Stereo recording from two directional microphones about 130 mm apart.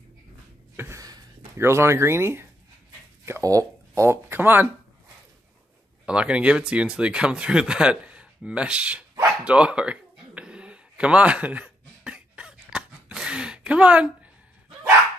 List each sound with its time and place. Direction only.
0.7 s speech: 20° right (ahead or behind)
6.0 s speech: 10° right (ahead or behind)
9.4 s a sound: 10° right (ahead or behind)